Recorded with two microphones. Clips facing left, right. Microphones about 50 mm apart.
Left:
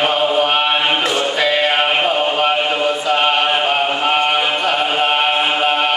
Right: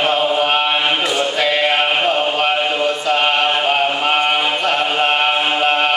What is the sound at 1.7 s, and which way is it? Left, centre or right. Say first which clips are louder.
Music: even; centre.